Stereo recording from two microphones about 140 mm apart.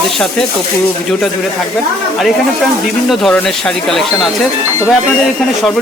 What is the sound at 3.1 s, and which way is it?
Speech, 5° left (ahead or behind).